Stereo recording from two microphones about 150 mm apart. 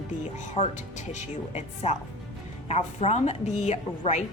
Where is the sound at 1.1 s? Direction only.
45° left (ahead or behind).